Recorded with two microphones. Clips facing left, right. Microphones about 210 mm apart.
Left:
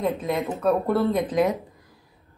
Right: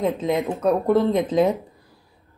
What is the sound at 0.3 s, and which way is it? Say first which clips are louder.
Speech: right 3 dB; centre (ahead or behind).